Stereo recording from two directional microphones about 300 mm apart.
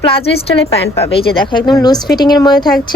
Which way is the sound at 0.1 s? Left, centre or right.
Centre.